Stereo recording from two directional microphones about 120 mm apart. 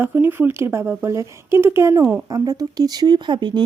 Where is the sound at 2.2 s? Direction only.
30° right (ahead or behind).